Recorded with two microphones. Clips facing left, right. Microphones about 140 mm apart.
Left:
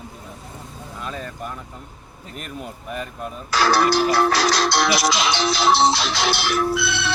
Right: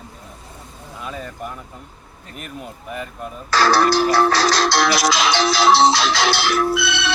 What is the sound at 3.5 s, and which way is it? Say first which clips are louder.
Music: right 2 dB; 90° right.